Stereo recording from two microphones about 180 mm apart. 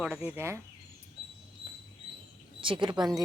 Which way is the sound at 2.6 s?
30° right (ahead or behind).